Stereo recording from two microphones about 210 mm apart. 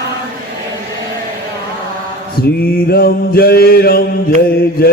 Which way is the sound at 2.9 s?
45° left (ahead or behind).